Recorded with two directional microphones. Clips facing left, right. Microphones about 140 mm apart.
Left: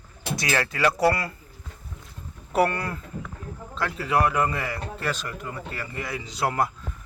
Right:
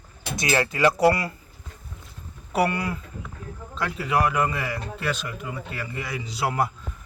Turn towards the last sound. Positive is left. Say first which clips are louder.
# even
turn(degrees=-5)  # may be behind; listen again after turning